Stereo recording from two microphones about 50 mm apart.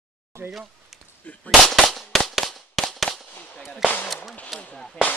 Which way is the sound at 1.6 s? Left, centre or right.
Centre.